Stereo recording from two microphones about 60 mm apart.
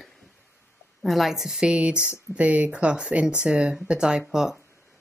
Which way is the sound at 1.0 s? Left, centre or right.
Centre.